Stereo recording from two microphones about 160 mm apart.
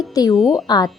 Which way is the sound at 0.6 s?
25° left (ahead or behind).